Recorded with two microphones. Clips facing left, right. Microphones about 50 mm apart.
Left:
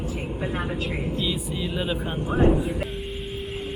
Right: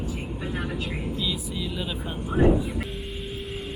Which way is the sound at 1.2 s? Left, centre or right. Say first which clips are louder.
Left 2 dB; centre.